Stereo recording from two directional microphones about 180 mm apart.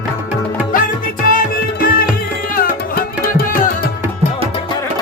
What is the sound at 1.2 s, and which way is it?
Music, 50° left (ahead or behind).